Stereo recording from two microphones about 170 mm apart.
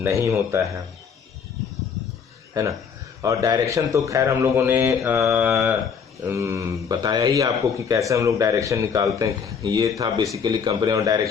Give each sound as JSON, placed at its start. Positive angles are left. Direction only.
{"t": 0.0, "sound": "a man's voice", "side_deg": -15}
{"t": 3.2, "sound": "a man's voice", "side_deg": -20}